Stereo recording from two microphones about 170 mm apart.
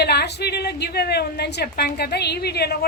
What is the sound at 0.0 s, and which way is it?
A woman's voice, 75° left (ahead or behind).